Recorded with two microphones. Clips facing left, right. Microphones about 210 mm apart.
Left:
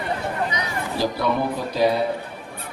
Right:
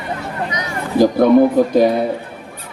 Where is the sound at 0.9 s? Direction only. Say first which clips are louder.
Right 13 dB; 50° right (ahead or behind).